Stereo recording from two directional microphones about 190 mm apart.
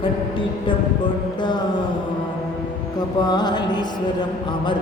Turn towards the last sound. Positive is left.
turn(degrees=20)  # may be behind; listen again after turning